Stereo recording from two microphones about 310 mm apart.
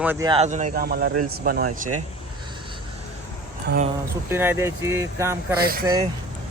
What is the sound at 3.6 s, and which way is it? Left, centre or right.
Speech, right.